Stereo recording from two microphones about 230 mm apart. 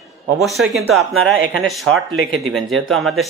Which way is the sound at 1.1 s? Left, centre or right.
Right.